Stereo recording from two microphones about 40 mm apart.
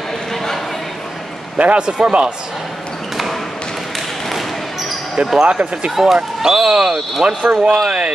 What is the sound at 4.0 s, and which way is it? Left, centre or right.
Basketball bounce, centre.